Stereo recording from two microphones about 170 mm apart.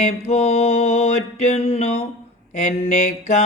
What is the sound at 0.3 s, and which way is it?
Mantra, 35° left (ahead or behind).